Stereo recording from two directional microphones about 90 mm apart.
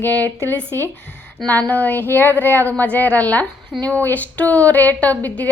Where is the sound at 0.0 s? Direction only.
20° left (ahead or behind).